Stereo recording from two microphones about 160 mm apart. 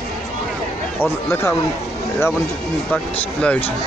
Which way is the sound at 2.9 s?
10° left (ahead or behind).